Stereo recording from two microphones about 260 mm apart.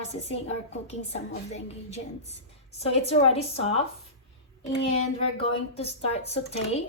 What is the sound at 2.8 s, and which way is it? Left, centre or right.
Speech, left.